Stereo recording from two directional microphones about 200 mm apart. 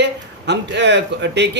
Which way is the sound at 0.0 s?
60° right (ahead or behind).